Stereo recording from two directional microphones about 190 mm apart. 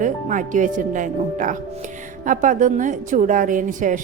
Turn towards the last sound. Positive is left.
turn(degrees=-40)  # may be behind; listen again after turning